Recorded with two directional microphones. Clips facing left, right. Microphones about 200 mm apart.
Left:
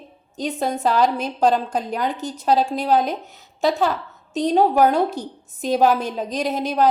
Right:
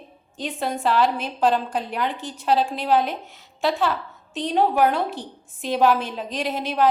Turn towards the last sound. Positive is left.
turn(degrees=40)  # may be behind; listen again after turning